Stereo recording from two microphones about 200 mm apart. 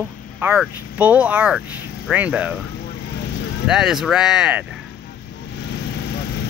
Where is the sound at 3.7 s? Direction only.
5° right (ahead or behind).